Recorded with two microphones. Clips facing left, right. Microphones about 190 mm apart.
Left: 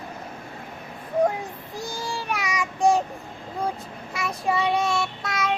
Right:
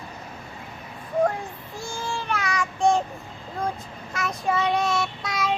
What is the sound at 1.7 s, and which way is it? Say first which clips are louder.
Baby cry: left 2 dB; 35° left (ahead or behind).